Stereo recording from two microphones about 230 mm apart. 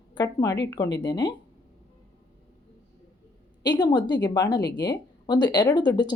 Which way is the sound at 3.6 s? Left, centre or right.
Centre.